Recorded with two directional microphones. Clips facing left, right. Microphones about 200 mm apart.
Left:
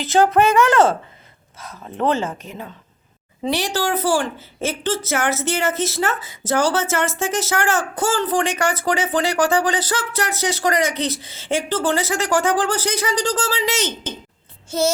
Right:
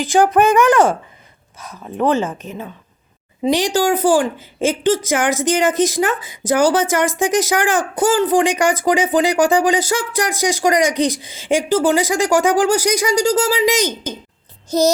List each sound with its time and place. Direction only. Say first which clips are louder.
0.0 s speech: right 2 dB; 15° right (ahead or behind)
3.4 s speech: right 6 dB; 15° right (ahead or behind)
14.7 s child singing: right 5 dB; 35° right (ahead or behind)